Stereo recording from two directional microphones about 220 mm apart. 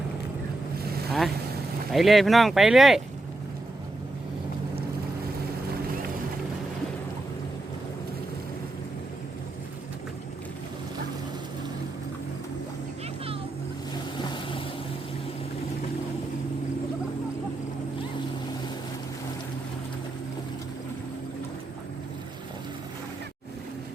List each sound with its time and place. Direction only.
0.8 s boat: 45° right (ahead or behind)
1.9 s speech: centre (ahead or behind)
14.2 s vehicle: 20° left (ahead or behind)